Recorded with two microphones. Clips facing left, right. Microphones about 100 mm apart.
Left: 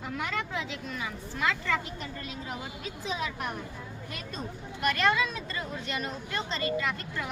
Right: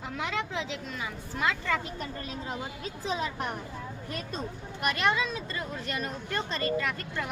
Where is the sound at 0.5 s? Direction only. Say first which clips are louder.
Even; 30° right (ahead or behind).